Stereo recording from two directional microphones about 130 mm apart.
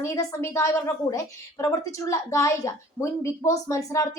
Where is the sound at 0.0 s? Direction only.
20° left (ahead or behind).